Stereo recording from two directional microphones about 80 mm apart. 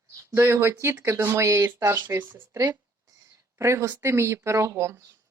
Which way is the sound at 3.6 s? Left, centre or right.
Right.